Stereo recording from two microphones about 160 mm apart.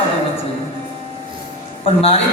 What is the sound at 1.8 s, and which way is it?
Speech, 35° left (ahead or behind).